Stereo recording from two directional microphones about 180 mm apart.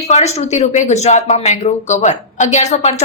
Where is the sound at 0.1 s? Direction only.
35° left (ahead or behind).